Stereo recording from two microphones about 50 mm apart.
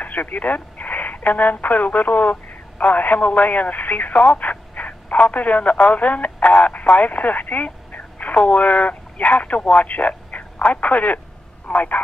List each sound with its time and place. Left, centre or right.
0.0 s speech: left